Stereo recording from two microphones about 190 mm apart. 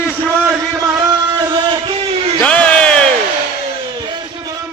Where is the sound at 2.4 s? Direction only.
5° left (ahead or behind).